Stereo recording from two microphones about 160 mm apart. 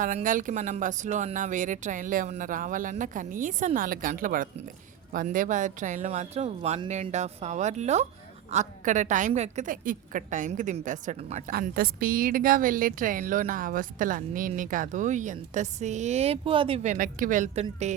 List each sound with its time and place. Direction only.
0.0 s a woman's voice: 55° right (ahead or behind)
11.5 s a woman's voice: 70° right (ahead or behind); by 16.8 s 35° right (ahead or behind)
16.8 s speech: 55° right (ahead or behind)